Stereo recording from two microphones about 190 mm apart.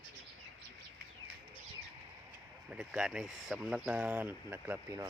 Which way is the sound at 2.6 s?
5° right (ahead or behind).